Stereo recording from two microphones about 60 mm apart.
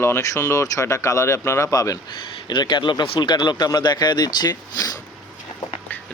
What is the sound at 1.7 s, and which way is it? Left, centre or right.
Speech, left.